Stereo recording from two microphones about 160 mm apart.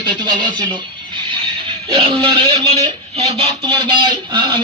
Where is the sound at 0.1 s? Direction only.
25° right (ahead or behind).